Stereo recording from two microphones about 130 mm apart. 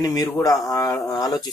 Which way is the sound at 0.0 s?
30° left (ahead or behind).